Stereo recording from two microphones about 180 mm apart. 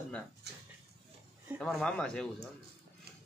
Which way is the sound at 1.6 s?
5° left (ahead or behind).